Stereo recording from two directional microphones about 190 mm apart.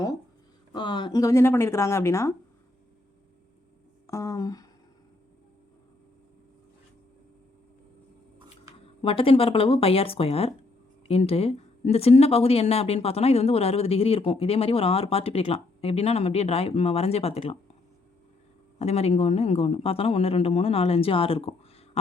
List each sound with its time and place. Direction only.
0.7 s speech: 25° left (ahead or behind)
4.0 s a sound: 15° left (ahead or behind)
9.0 s speech: 30° left (ahead or behind)
18.8 s speech: 35° left (ahead or behind)